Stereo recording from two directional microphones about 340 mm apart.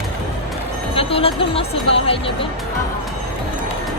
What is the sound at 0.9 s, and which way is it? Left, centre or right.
Speech, centre.